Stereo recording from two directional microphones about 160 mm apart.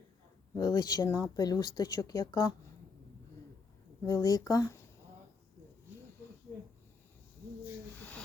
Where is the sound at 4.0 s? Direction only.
20° left (ahead or behind).